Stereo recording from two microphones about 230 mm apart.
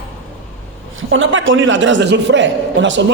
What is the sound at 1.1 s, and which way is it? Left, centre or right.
Speech, right.